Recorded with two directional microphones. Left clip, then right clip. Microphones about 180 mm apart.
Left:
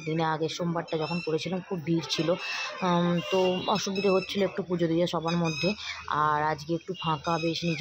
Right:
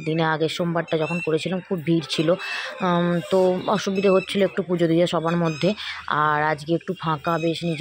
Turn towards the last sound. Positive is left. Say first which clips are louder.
# right 5 dB
turn(degrees=-20)  # may be behind; listen again after turning